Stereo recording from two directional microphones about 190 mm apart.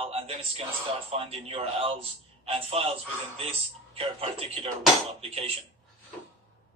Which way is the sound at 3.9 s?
30° right (ahead or behind).